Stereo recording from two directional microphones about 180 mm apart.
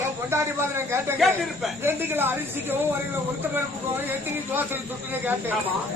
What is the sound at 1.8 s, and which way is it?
Speech, 10° right (ahead or behind).